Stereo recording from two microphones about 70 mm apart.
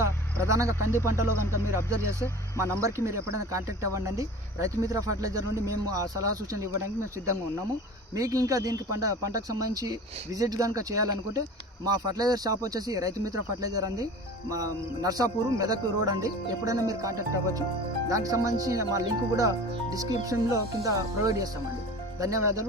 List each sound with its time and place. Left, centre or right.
0.0 s a sound: right
0.9 s speech: right
11.9 s speech: right